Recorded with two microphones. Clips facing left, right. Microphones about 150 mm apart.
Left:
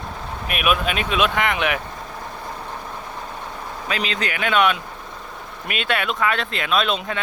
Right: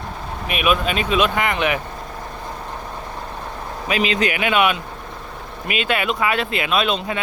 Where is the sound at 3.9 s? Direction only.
15° right (ahead or behind).